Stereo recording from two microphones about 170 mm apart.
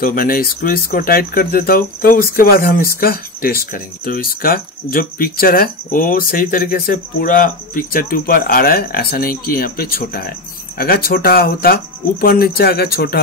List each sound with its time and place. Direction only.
0.0 s speech: 55° left (ahead or behind)